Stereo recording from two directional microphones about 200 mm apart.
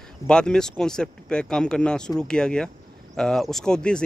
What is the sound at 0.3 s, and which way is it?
Speech, 5° left (ahead or behind).